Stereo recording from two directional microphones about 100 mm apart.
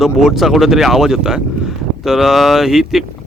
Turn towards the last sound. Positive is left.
turn(degrees=-5)  # may be behind; listen again after turning